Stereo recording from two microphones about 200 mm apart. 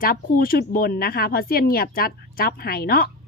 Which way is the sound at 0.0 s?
45° left (ahead or behind).